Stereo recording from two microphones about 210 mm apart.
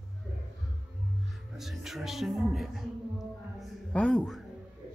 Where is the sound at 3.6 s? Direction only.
5° left (ahead or behind).